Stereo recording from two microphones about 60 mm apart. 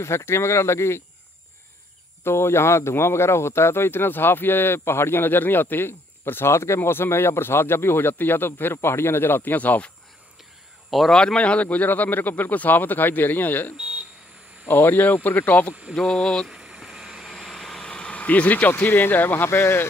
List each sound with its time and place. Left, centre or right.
0.0 s speech: left
2.2 s speech: left
10.9 s speech: centre
11.1 s speech: centre
15.8 s speech: centre
16.4 s vehicle: centre
17.8 s vehicle: centre
18.7 s speech: left